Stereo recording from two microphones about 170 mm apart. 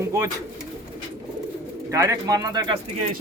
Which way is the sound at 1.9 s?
15° right (ahead or behind).